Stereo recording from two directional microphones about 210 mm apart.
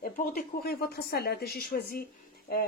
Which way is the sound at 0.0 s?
45° left (ahead or behind).